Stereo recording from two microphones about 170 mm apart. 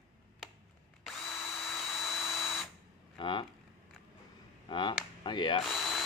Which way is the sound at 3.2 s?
25° left (ahead or behind).